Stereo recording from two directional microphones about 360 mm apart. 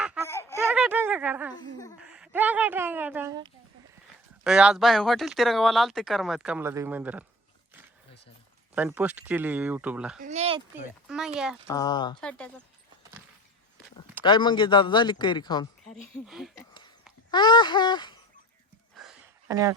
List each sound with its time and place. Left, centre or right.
0.0 s baby laughter: centre
0.3 s baby laughter: centre
0.5 s a sound: centre
1.5 s speech: centre
2.0 s speech: centre
8.7 s speech: centre
10.2 s speech: centre
11.1 s speech: centre
11.7 s speech: centre
14.3 s speech: centre
16.2 s speech: centre
17.3 s speech: centre
18.9 s a sound: centre